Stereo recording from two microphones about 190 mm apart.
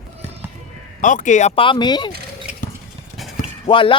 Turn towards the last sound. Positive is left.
turn(degrees=25)  # may be behind; listen again after turning